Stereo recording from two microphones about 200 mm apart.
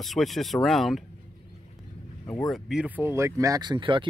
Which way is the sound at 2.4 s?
Centre (ahead or behind).